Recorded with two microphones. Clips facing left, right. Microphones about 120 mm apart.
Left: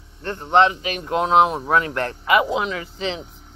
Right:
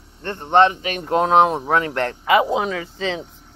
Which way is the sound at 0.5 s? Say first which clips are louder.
Right 2 dB; 45° right (ahead or behind).